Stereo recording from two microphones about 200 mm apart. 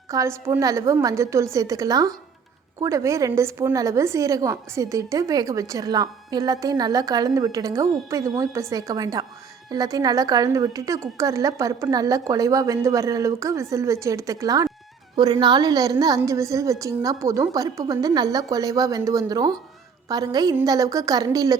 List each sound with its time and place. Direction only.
0.1 s a woman's voice: 15° right (ahead or behind)